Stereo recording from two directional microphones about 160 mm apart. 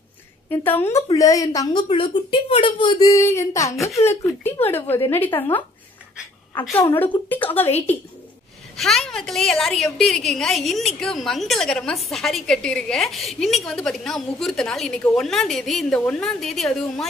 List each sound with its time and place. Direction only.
0.5 s speech: 15° left (ahead or behind)
1.9 s speech: 35° left (ahead or behind); by 5.6 s 10° left (ahead or behind)
6.7 s speech: 15° left (ahead or behind)
8.7 s a woman's voice: centre (ahead or behind)